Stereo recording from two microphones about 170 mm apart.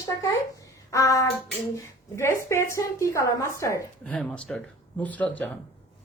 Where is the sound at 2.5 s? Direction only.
15° left (ahead or behind).